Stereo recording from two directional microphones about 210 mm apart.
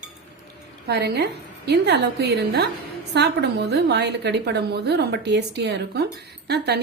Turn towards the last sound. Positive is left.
turn(degrees=-50)  # may be behind; listen again after turning